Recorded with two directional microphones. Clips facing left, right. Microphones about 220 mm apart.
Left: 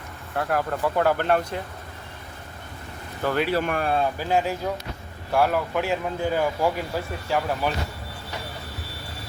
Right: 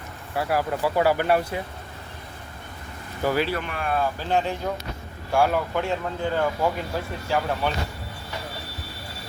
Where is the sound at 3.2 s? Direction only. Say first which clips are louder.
Right 1 dB; 10° right (ahead or behind).